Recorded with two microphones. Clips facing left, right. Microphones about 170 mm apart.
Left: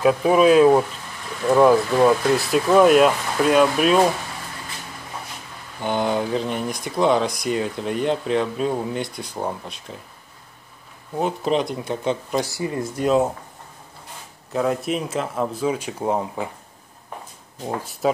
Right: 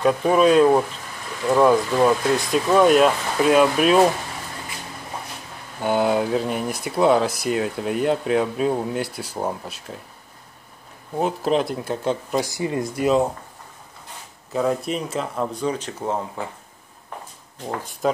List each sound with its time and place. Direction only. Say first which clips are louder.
0.0 s speech: left 1 dB; 5° left (ahead or behind)
5.8 s speech: right 2 dB; 5° right (ahead or behind)
11.1 s speech: right 1 dB; centre (ahead or behind)
12.4 s speech: right 1 dB; 20° right (ahead or behind)
13.0 s speech: even; centre (ahead or behind)
14.5 s speech: even; centre (ahead or behind)
18.0 s speech: left 1 dB; centre (ahead or behind)